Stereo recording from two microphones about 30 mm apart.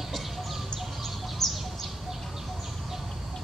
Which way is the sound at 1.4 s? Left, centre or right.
Centre.